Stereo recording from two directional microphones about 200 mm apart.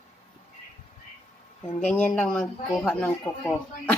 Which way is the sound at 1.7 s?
10° left (ahead or behind).